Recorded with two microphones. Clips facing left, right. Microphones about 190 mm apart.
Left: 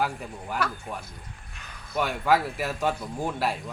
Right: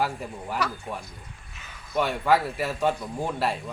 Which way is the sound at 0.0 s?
Centre (ahead or behind).